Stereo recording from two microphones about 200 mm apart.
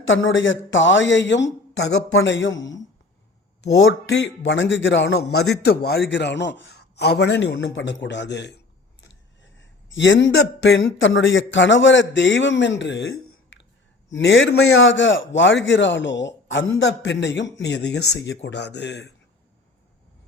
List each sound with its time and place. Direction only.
0.0 s a man's voice: 70° left (ahead or behind)
3.8 s a man's voice: 70° left (ahead or behind)
9.0 s a sound: 65° left (ahead or behind)
10.3 s a man's voice: 60° left (ahead or behind)
14.1 s a man's voice: 65° left (ahead or behind)